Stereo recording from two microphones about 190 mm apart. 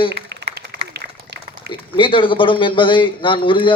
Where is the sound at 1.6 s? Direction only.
25° left (ahead or behind).